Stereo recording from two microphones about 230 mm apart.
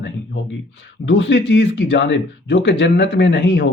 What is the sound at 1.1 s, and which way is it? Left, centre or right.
Speech, left.